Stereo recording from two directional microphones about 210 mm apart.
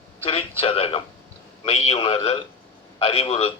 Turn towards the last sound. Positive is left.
turn(degrees=30)  # may be behind; listen again after turning